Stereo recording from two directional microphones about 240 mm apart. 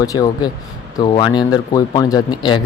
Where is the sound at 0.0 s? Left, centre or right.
Centre.